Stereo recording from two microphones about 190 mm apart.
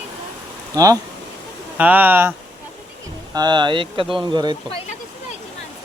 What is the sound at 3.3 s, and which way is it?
Speech, 20° right (ahead or behind).